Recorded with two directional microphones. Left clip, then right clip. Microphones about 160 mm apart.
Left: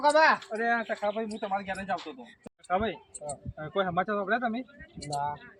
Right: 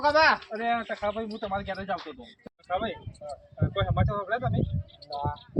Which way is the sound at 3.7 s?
15° right (ahead or behind).